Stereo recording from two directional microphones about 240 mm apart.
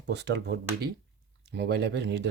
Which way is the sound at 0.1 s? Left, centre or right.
Right.